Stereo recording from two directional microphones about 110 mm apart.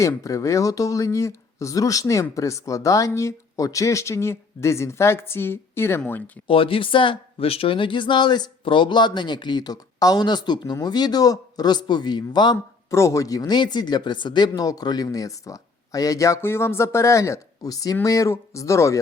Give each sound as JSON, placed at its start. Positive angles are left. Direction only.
{"t": 0.2, "sound": "speech", "side_deg": 30}
{"t": 6.5, "sound": "speech", "side_deg": 55}
{"t": 12.9, "sound": "speech", "side_deg": 25}